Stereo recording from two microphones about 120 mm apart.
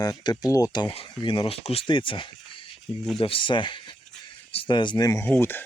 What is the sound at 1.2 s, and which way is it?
Speech, 50° left (ahead or behind).